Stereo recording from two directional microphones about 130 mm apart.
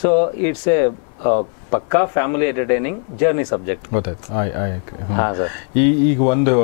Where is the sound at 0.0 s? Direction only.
15° left (ahead or behind).